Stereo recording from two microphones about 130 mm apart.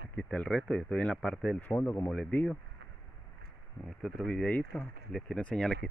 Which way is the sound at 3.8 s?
5° left (ahead or behind).